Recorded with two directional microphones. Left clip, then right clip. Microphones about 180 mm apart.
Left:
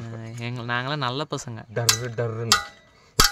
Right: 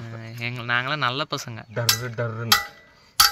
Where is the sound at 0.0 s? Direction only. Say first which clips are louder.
Right 4 dB; 20° left (ahead or behind).